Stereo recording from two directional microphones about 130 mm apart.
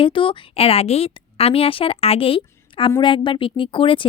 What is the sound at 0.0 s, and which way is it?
A woman's voice, 40° left (ahead or behind).